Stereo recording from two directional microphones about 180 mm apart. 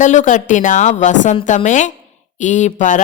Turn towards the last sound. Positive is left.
turn(degrees=45)  # may be behind; listen again after turning